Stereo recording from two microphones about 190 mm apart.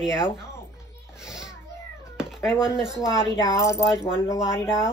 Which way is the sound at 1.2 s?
5° right (ahead or behind).